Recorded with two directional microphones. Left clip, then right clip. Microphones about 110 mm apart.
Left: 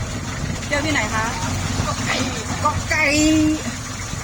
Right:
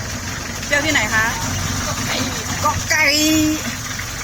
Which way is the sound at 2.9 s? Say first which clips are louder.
Right 3 dB; 5° right (ahead or behind).